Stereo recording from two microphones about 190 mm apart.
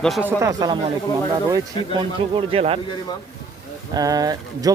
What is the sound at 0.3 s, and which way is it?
Speech, 15° right (ahead or behind).